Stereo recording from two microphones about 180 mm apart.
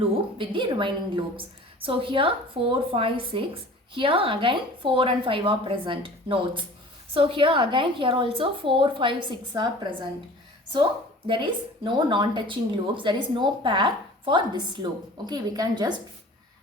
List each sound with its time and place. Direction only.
0.0 s a woman's voice: 30° right (ahead or behind)
11.3 s a woman's voice: 25° right (ahead or behind)